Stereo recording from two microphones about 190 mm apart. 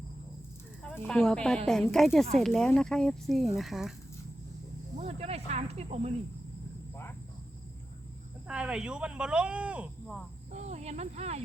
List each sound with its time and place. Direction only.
0.9 s speech: 5° left (ahead or behind)
4.9 s speech: 35° right (ahead or behind)
6.9 s cricket: 10° left (ahead or behind)
8.4 s speech: 5° right (ahead or behind)
10.5 s snake: 35° right (ahead or behind)